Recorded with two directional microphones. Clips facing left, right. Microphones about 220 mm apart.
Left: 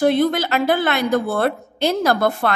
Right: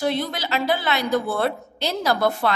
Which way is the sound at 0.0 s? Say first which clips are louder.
Left 8 dB; 55° left (ahead or behind).